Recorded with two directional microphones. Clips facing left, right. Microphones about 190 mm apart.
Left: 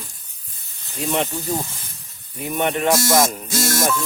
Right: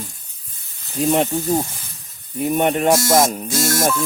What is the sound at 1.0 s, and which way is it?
Music, 45° right (ahead or behind).